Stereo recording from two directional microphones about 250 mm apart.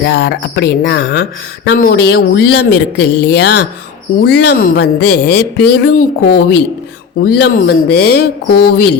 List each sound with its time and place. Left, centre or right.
0.0 s speech: left